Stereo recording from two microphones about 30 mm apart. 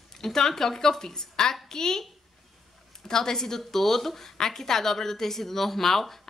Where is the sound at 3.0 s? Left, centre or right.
Centre.